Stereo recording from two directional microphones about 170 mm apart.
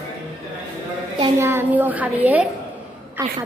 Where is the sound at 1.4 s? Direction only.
15° right (ahead or behind).